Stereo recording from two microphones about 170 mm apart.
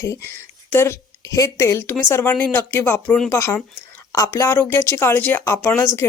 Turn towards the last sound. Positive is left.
turn(degrees=15)  # may be behind; listen again after turning